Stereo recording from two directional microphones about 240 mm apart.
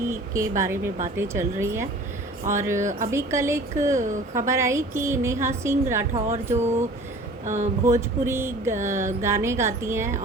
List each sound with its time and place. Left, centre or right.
0.1 s a woman's voice: centre
6.1 s speech: right
7.9 s a woman's voice: centre